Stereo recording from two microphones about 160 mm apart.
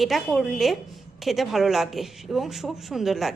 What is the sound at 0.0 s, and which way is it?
Speech, centre (ahead or behind).